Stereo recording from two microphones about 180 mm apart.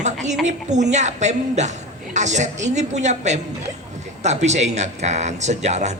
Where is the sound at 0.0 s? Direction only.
40° right (ahead or behind).